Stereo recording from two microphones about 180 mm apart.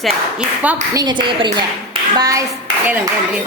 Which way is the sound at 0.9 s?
20° right (ahead or behind).